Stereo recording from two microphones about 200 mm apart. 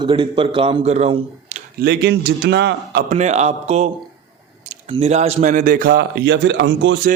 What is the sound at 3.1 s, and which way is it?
A man's voice, 35° right (ahead or behind).